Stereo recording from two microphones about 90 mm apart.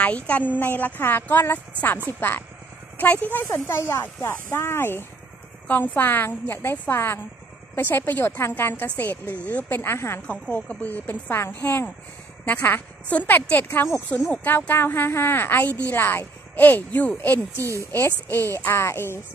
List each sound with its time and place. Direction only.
0.0 s a woman's voice: 20° left (ahead or behind)
10.2 s a woman's voice: 15° left (ahead or behind); by 19.2 s 30° left (ahead or behind)